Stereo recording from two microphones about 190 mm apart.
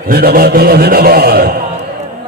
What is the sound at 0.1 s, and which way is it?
A man's voice, 55° right (ahead or behind).